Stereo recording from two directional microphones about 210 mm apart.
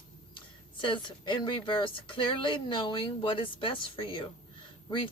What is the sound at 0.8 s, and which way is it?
Speech, 25° left (ahead or behind).